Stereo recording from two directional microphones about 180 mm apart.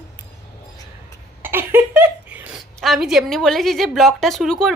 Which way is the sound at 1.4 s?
10° right (ahead or behind).